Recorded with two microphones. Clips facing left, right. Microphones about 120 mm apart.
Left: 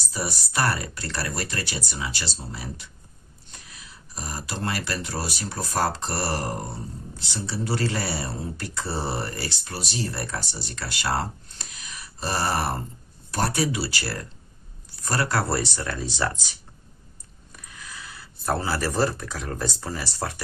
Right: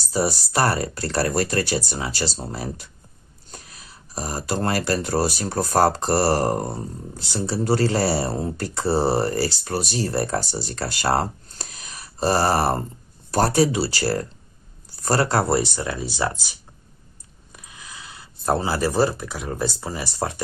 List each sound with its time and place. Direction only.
0.1 s speech: 35° right (ahead or behind); by 16.3 s 15° right (ahead or behind)
17.5 s speech: 20° right (ahead or behind)